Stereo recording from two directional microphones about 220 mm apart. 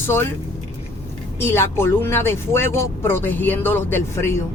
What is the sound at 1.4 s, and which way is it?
Speech, 10° left (ahead or behind).